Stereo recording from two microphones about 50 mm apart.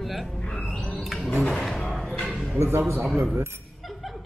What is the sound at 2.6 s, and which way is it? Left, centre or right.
Speech, right.